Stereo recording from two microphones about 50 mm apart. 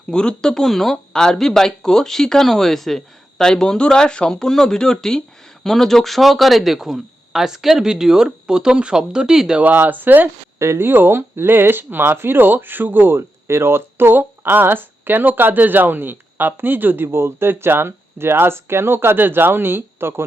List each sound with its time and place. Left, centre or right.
0.1 s speech: centre
9.6 s speech: right
10.6 s speech: right